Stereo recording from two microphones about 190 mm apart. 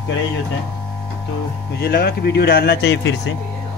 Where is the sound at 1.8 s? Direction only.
55° left (ahead or behind).